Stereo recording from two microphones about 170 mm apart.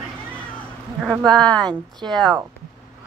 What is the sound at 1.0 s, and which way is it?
Speech, centre (ahead or behind).